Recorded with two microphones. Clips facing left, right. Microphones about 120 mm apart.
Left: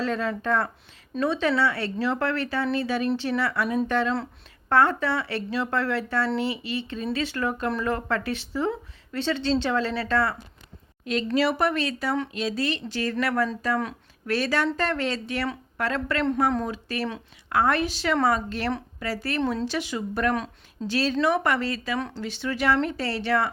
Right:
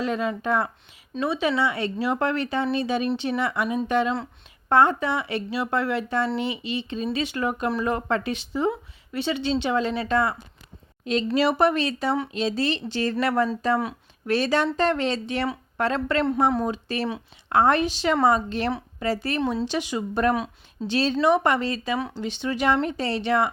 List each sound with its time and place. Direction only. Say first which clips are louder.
0.0 s a woman's voice: right 1 dB; 15° right (ahead or behind)
13.7 s speech: right 2 dB; 15° right (ahead or behind)
21.9 s speech: right 1 dB; 10° right (ahead or behind)
22.2 s speech: right 2 dB; 20° right (ahead or behind)